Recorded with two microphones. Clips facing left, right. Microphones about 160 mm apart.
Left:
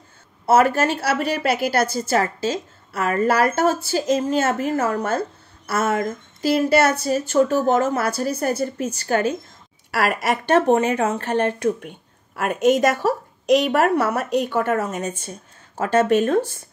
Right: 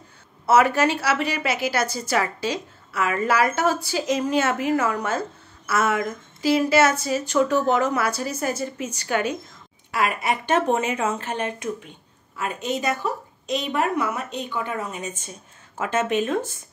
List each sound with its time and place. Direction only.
0.5 s a woman's voice: 50° left (ahead or behind)
10.7 s speech: 30° left (ahead or behind)
11.1 s speech: 60° left (ahead or behind)
14.8 s a woman's voice: 45° left (ahead or behind)